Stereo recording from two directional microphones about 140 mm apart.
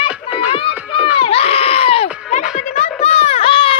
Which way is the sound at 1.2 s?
45° left (ahead or behind).